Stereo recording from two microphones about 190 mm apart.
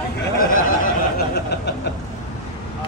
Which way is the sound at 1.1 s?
60° left (ahead or behind).